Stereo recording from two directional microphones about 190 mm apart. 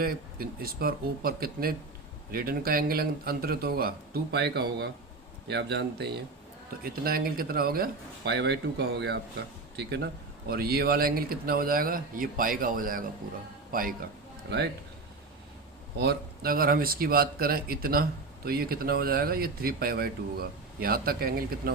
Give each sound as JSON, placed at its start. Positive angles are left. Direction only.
{"t": 0.0, "sound": "speech", "side_deg": -50}
{"t": 16.0, "sound": "speech", "side_deg": -55}